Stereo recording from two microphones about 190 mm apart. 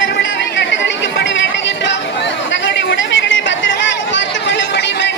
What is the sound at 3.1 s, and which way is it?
Chatter, 80° left.